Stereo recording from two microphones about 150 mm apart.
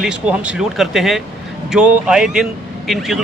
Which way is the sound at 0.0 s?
5° right (ahead or behind).